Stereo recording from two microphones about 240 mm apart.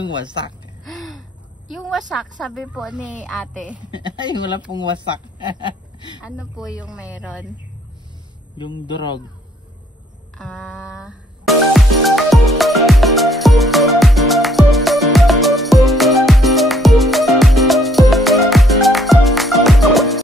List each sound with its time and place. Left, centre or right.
0.8 s gasp: centre
1.8 s a woman's voice: centre
4.0 s speech: centre
5.7 s speech: centre
6.2 s a woman's voice: centre
8.5 s a man's voice: centre
10.3 s music: centre